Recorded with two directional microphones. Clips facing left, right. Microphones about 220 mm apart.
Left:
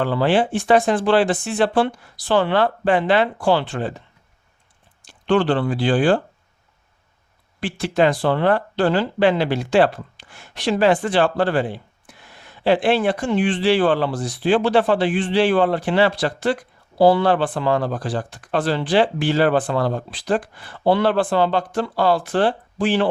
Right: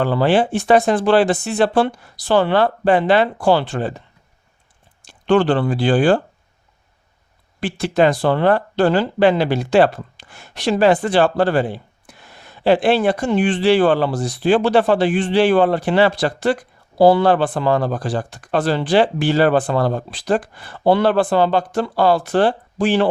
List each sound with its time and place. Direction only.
0.0 s speech: 40° right (ahead or behind)
5.2 s speech: 45° right (ahead or behind)
7.6 s speech: 40° right (ahead or behind)